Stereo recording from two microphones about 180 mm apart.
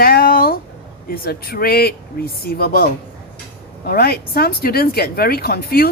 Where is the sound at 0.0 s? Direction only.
55° left (ahead or behind).